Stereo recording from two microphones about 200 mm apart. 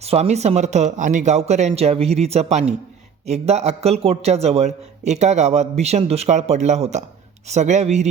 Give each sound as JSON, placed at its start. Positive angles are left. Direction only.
{"t": 0.0, "sound": "a man's voice", "side_deg": -30}